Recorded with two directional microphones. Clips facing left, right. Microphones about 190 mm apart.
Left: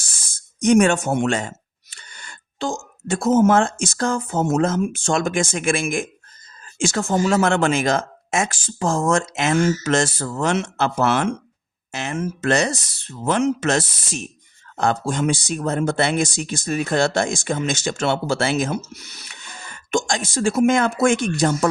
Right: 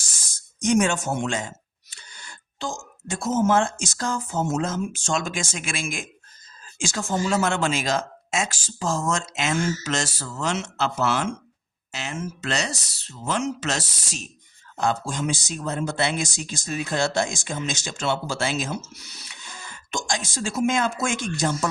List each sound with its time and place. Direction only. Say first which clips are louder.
0.0 s speech: left 1 dB; 55° left (ahead or behind)